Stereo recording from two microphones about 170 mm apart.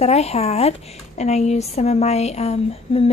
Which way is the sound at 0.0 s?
40° left (ahead or behind).